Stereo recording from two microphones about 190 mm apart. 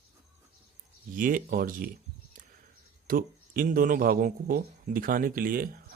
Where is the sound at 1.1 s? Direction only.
45° right (ahead or behind).